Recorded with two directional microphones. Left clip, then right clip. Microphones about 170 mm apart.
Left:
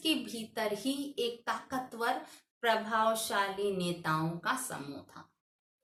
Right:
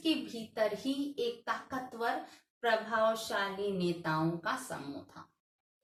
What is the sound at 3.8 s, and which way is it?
Speech, 30° left (ahead or behind).